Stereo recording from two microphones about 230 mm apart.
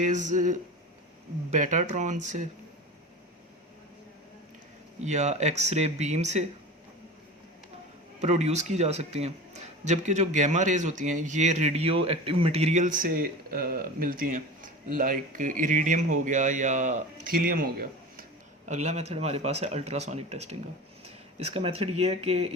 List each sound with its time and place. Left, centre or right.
0.0 s speech: right
5.0 s speech: right
8.2 s speech: right
18.7 s speech: right